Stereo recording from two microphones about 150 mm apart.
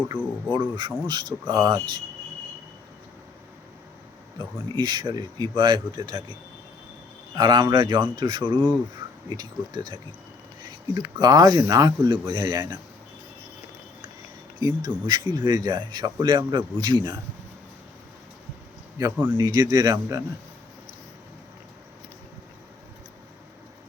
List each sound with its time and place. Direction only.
0.1 s speech: 10° right (ahead or behind)
0.5 s speech: 30° right (ahead or behind)
4.7 s speech: 30° right (ahead or behind)
7.3 s speech: 30° right (ahead or behind)
14.6 s speech: 25° right (ahead or behind)
19.1 s speech: 15° right (ahead or behind)
19.4 s speech: 25° right (ahead or behind)